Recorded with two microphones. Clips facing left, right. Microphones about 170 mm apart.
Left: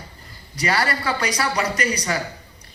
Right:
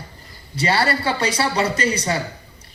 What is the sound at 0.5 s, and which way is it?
A man's voice, 30° right (ahead or behind).